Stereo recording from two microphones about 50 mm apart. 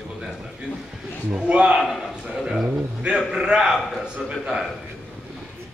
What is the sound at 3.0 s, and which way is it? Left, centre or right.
Speech, centre.